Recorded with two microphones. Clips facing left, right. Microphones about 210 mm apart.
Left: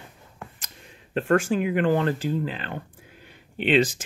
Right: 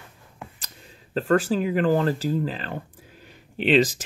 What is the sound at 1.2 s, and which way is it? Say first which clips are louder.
Speech: even; 35° right (ahead or behind).